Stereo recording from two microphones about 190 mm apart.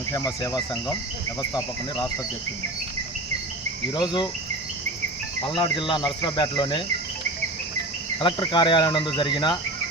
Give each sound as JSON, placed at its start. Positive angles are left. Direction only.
{"t": 0.1, "sound": "cricket", "side_deg": 15}
{"t": 1.4, "sound": "speech", "side_deg": 20}
{"t": 3.9, "sound": "speech", "side_deg": 25}
{"t": 5.5, "sound": "speech", "side_deg": 25}
{"t": 8.2, "sound": "speech", "side_deg": 25}